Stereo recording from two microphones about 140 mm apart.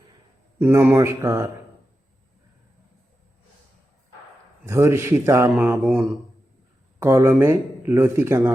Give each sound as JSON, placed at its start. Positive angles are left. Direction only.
{"t": 0.6, "sound": "speech", "side_deg": -15}
{"t": 4.6, "sound": "speech", "side_deg": -20}
{"t": 5.5, "sound": "speech", "side_deg": -10}
{"t": 7.0, "sound": "speech", "side_deg": -20}